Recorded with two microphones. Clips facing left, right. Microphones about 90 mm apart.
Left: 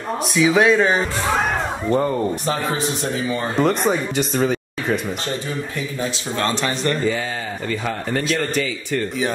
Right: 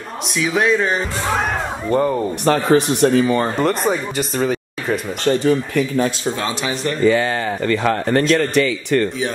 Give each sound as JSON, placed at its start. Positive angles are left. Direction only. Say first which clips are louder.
{"t": 0.4, "sound": "speech", "louder": "left 2 dB", "side_deg": 0}
{"t": 2.4, "sound": "speech", "louder": "right 7 dB", "side_deg": -65}
{"t": 3.5, "sound": "speech", "louder": "even", "side_deg": 0}
{"t": 5.2, "sound": "speech", "louder": "right 10 dB", "side_deg": -70}
{"t": 6.4, "sound": "speech", "louder": "left 5 dB", "side_deg": -5}
{"t": 7.0, "sound": "speech", "louder": "right 7 dB", "side_deg": -70}